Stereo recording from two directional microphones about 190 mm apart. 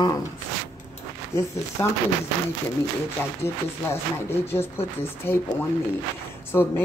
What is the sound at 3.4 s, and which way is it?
Speech, 15° left (ahead or behind).